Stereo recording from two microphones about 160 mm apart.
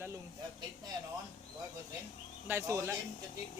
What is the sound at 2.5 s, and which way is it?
Speech, 15° right (ahead or behind).